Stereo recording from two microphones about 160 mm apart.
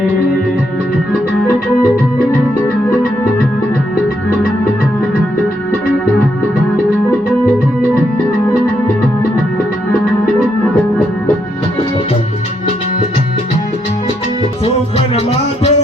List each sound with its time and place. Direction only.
14.6 s music: 40° left (ahead or behind)